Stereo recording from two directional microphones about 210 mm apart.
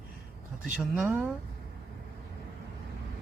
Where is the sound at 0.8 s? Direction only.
5° right (ahead or behind).